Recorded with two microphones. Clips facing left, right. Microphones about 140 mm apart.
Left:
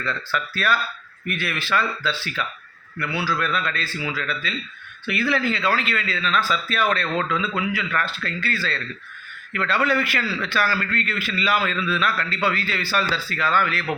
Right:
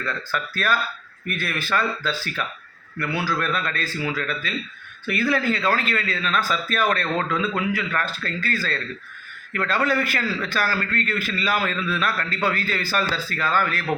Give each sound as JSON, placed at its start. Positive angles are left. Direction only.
{"t": 0.0, "sound": "a man's voice", "side_deg": -45}